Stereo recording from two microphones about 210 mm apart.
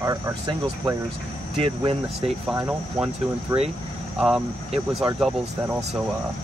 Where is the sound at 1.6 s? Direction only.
25° right (ahead or behind).